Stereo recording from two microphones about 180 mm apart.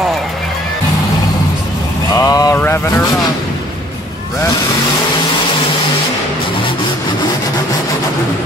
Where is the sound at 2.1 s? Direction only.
20° left (ahead or behind).